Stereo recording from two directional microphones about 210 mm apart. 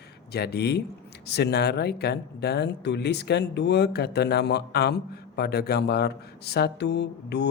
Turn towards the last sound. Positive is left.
turn(degrees=55)  # may be behind; listen again after turning